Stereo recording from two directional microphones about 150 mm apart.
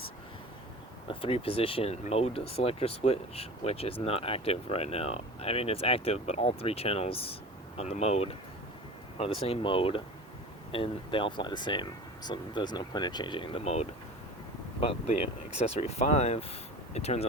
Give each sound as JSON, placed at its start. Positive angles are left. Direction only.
{"t": 1.0, "sound": "speech", "side_deg": 35}